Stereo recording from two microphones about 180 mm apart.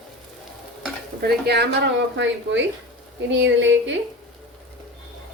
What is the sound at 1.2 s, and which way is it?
Speech, 65° right (ahead or behind).